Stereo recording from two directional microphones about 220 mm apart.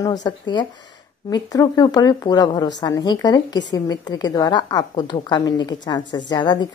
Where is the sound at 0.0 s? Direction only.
15° left (ahead or behind).